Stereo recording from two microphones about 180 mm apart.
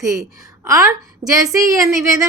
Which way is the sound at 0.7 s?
15° right (ahead or behind).